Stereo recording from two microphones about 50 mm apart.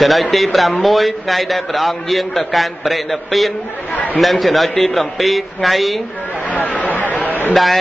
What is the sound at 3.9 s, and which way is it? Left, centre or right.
Chatter, left.